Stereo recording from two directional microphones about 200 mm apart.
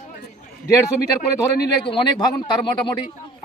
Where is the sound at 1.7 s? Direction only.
25° left (ahead or behind).